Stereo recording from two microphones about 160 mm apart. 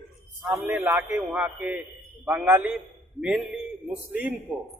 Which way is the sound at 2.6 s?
5° right (ahead or behind).